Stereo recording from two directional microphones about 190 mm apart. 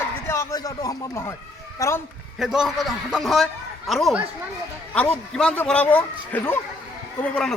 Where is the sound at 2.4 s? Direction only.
5° right (ahead or behind).